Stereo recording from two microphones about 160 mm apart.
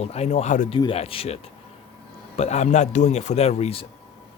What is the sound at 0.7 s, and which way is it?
Speech, 35° left (ahead or behind).